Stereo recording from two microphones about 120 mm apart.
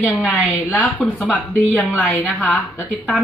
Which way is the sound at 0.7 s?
10° left (ahead or behind).